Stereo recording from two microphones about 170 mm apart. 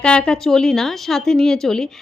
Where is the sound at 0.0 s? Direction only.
5° left (ahead or behind).